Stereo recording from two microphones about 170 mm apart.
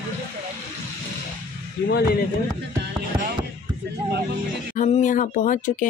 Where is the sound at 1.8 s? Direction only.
70° left (ahead or behind).